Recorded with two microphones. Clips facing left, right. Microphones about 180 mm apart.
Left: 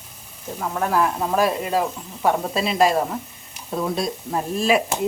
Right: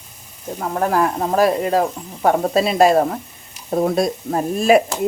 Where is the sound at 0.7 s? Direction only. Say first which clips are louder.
Right 3 dB; 45° right (ahead or behind).